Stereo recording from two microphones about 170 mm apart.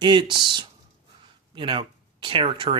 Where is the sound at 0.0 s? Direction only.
25° right (ahead or behind).